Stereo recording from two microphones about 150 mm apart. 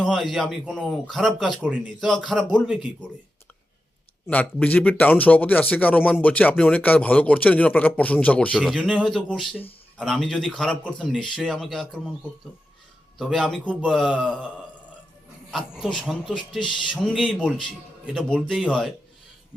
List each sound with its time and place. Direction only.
0.0 s speech: centre (ahead or behind)
4.3 s a man's voice: 10° left (ahead or behind)
13.1 s speech: centre (ahead or behind)
15.4 s speech: 5° right (ahead or behind)
16.5 s speech: 30° left (ahead or behind)
16.9 s speech: 5° right (ahead or behind)